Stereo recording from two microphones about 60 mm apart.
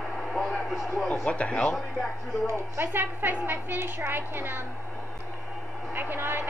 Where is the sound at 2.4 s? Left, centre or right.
Right.